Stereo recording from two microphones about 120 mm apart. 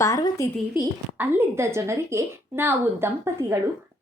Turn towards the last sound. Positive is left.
turn(degrees=-20)  # may be behind; listen again after turning